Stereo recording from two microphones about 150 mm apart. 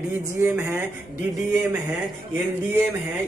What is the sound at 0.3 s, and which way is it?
Speech, 15° right (ahead or behind).